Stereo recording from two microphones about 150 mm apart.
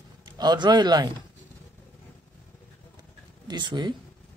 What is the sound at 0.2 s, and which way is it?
Speech, 30° right (ahead or behind).